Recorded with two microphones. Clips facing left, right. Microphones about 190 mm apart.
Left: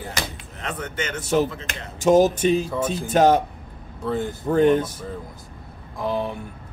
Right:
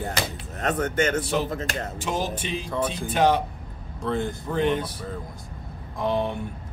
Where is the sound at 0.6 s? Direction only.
45° right (ahead or behind).